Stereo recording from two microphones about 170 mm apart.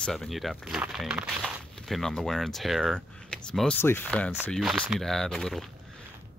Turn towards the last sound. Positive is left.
turn(degrees=0)  # may be behind; listen again after turning